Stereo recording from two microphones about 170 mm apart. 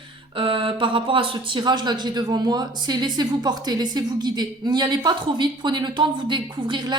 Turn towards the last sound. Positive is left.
turn(degrees=-25)  # may be behind; listen again after turning